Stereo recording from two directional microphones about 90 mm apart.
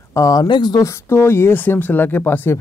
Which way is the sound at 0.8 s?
35° left (ahead or behind).